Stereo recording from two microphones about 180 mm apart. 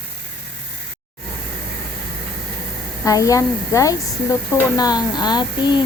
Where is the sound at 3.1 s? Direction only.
20° left (ahead or behind).